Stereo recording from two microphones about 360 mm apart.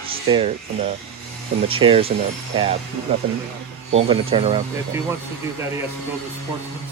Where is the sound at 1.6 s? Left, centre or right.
Centre.